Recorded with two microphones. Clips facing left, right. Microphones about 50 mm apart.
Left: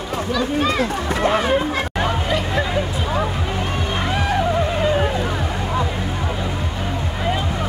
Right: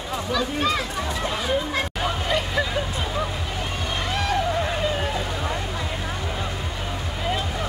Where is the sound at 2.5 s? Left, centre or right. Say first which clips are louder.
Left 4 dB; centre.